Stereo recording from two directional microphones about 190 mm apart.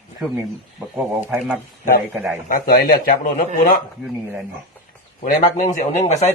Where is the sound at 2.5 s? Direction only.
50° left (ahead or behind).